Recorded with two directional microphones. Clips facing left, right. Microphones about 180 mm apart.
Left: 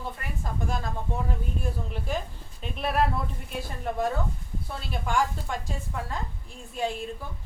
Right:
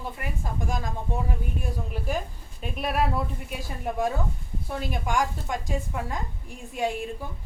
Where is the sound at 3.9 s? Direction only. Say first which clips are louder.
Right 1 dB; 10° right (ahead or behind).